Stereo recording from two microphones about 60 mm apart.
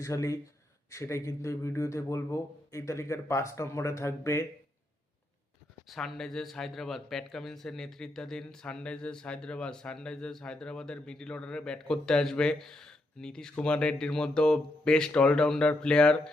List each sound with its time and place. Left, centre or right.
0.0 s a man's voice: left
5.9 s speech: centre